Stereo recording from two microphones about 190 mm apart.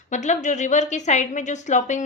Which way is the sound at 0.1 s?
40° left (ahead or behind).